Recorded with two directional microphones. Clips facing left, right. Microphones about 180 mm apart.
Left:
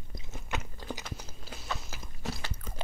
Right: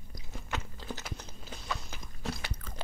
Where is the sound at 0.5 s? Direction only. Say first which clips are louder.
Left 1 dB; 15° left (ahead or behind).